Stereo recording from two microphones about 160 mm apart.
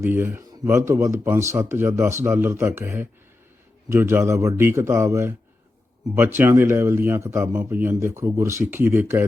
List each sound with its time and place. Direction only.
0.0 s speech: 15° right (ahead or behind)